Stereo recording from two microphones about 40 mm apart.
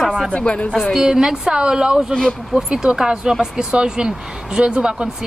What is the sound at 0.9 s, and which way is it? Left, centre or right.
A woman's voice, centre.